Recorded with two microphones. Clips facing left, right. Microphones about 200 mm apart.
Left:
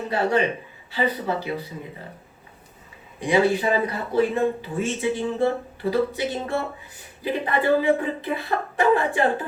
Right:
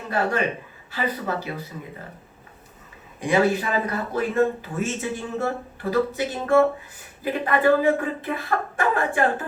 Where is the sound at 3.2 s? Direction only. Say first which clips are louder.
Left 1 dB; 50° right (ahead or behind).